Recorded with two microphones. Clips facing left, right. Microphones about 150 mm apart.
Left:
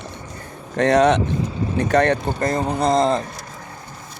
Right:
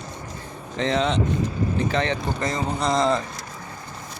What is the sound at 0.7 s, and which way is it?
Speech, 65° left (ahead or behind).